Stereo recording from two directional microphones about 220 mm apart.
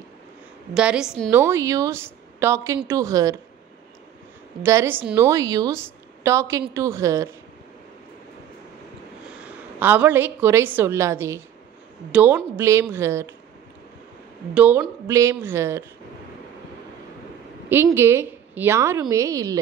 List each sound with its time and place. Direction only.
0.7 s a woman's voice: 5° right (ahead or behind)
4.6 s a woman's voice: 10° right (ahead or behind)
9.4 s a woman's voice: 10° right (ahead or behind)
14.5 s a woman's voice: 10° right (ahead or behind)
17.6 s a woman's voice: 10° right (ahead or behind)